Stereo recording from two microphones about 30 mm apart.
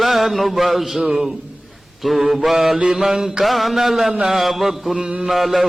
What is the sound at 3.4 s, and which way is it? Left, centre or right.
A man's voice, centre.